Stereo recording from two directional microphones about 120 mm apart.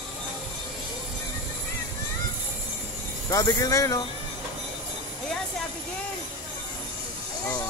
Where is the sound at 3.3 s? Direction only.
30° left (ahead or behind).